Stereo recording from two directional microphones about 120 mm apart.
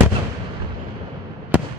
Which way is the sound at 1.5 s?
15° right (ahead or behind).